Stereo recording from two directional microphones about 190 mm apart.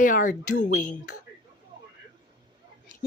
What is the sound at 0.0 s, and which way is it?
Speech, 45° left (ahead or behind).